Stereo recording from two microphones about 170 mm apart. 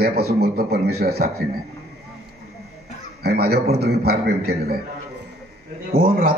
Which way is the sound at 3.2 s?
70° right (ahead or behind).